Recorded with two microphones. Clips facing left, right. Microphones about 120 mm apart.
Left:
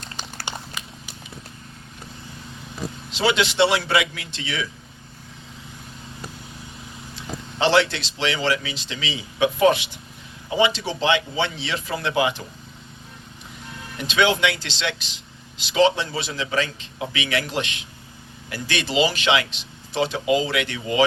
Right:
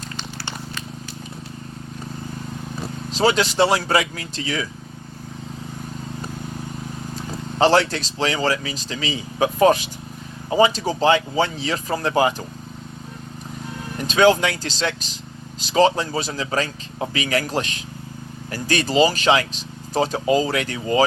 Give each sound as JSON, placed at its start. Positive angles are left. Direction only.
{"t": 3.1, "sound": "speech", "side_deg": -40}
{"t": 7.2, "sound": "speech", "side_deg": -40}
{"t": 14.0, "sound": "speech", "side_deg": -40}